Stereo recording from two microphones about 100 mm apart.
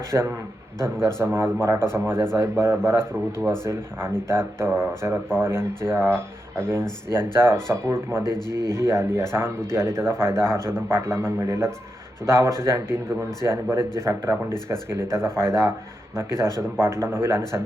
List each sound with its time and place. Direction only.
0.1 s speech: 25° right (ahead or behind)
8.2 s a man's voice: 40° left (ahead or behind)
8.7 s speech: 25° right (ahead or behind)